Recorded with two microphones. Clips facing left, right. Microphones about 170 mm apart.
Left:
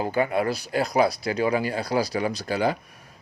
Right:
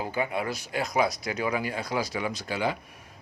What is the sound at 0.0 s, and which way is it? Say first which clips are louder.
Speech: left 6 dB; 50° left (ahead or behind).